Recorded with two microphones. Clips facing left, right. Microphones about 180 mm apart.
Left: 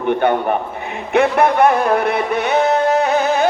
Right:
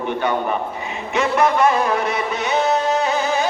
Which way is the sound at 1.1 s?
60° left (ahead or behind).